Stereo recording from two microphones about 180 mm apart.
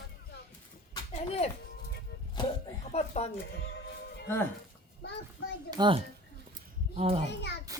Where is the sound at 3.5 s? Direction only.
65° left (ahead or behind).